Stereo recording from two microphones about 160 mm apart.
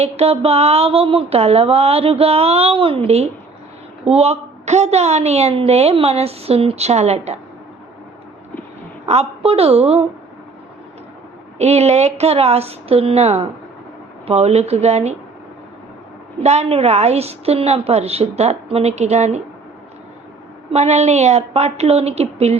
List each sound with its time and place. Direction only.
0.0 s a woman's voice: 40° right (ahead or behind)
9.0 s a woman's voice: 40° right (ahead or behind)
11.5 s a woman's voice: 45° right (ahead or behind)
16.4 s a woman's voice: 40° right (ahead or behind)
20.7 s a woman's voice: 45° right (ahead or behind)